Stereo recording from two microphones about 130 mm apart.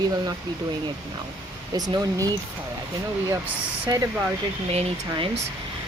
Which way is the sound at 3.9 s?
30° right (ahead or behind).